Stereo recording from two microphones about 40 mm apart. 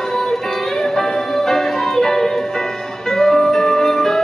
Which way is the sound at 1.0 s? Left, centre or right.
Centre.